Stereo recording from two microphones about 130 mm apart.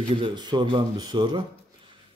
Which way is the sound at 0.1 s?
40° right (ahead or behind).